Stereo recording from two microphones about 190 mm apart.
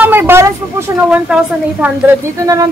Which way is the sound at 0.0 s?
10° right (ahead or behind).